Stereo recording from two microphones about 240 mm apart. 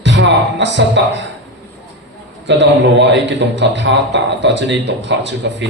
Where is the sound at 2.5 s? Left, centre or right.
Right.